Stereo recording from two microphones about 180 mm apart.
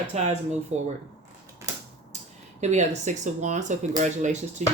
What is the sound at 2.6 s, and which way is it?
Speech, 40° right (ahead or behind).